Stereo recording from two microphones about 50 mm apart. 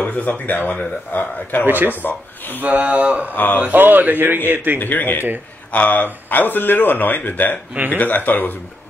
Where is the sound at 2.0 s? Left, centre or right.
Left.